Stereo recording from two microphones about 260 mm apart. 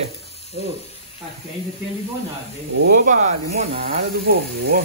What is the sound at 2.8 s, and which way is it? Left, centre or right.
Speech, right.